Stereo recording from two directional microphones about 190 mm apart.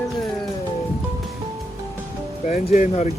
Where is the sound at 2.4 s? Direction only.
40° left (ahead or behind).